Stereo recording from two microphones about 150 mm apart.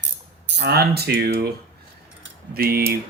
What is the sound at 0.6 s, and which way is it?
Speech, 90° right.